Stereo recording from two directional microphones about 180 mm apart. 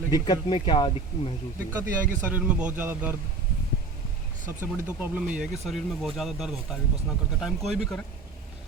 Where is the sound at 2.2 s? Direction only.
5° right (ahead or behind).